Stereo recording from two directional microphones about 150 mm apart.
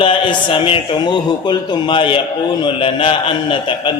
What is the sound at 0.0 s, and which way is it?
A man's voice, 35° left (ahead or behind).